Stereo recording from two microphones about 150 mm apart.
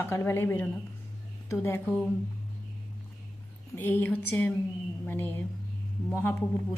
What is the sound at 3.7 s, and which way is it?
A woman's voice, 15° left (ahead or behind).